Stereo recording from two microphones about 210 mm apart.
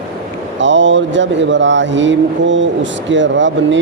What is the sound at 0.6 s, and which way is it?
Speech, 60° right (ahead or behind).